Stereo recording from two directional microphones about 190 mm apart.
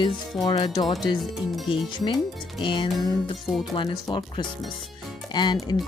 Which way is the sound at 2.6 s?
25° left (ahead or behind).